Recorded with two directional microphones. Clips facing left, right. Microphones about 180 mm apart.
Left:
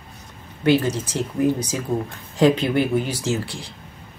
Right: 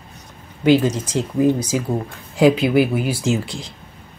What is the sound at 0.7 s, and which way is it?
Speech, 15° right (ahead or behind).